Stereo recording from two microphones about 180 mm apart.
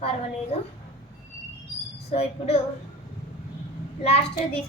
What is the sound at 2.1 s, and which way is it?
Speech, 35° left (ahead or behind).